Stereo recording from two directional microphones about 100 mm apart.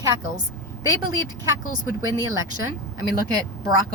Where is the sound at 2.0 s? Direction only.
40° right (ahead or behind).